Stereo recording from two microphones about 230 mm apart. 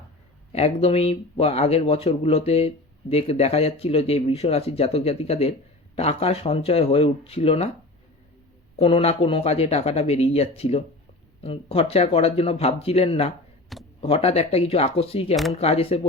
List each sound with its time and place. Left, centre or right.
0.5 s speech: left
8.8 s speech: left